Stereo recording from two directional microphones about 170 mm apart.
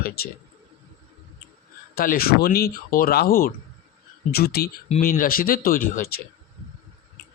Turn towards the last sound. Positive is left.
turn(degrees=55)  # may be behind; listen again after turning